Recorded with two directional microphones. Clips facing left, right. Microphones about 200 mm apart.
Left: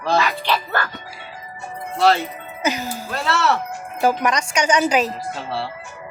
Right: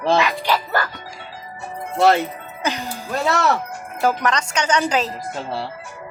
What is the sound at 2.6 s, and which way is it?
Speech, 5° left (ahead or behind).